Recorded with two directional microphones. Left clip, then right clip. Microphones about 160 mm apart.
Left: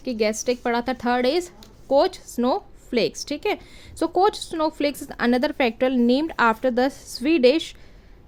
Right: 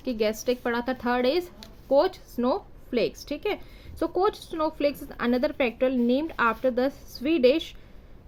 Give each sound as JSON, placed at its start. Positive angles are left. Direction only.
{"t": 0.0, "sound": "speech", "side_deg": 25}